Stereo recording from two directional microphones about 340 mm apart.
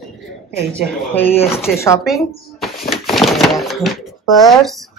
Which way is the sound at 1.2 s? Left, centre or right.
Centre.